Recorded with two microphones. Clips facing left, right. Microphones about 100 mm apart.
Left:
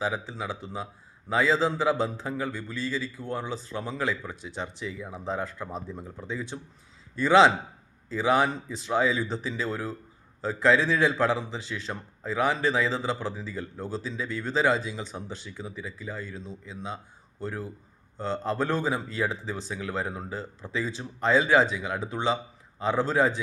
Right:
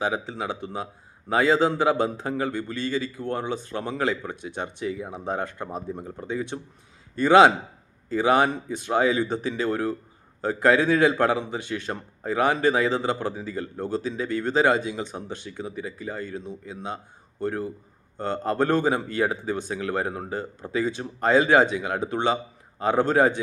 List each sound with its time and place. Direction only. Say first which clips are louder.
0.0 s speech: right 3 dB; 65° right (ahead or behind)
5.9 s speech: right 5 dB; 45° right (ahead or behind)